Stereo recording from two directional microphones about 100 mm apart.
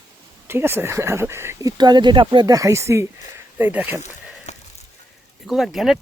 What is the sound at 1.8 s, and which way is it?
Speech, 45° right (ahead or behind).